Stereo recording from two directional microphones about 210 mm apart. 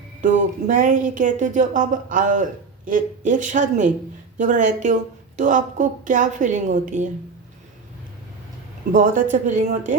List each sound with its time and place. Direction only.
0.2 s speech: 35° right (ahead or behind)
8.9 s speech: 40° right (ahead or behind)